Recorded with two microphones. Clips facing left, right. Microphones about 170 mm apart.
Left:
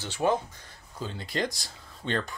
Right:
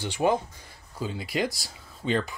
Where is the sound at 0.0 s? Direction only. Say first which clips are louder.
Right 2 dB; 15° right (ahead or behind).